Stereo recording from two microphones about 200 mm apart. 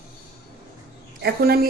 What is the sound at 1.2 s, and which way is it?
Speech, 50° right (ahead or behind).